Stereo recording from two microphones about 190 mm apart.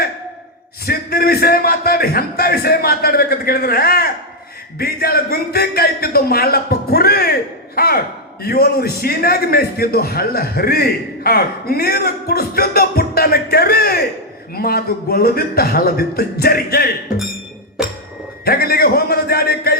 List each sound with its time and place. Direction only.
0.9 s a man's voice: 55° left (ahead or behind)
17.8 s music: 5° right (ahead or behind)
18.4 s a man's voice: 55° left (ahead or behind)